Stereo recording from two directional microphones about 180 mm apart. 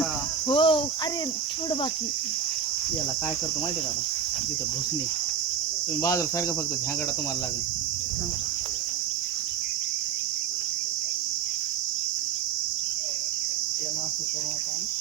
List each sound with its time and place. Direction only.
0.4 s speech: 30° left (ahead or behind)
6.0 s speech: 15° left (ahead or behind)